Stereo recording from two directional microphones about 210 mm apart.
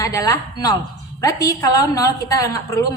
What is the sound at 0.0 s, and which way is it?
A woman's voice, 15° left (ahead or behind).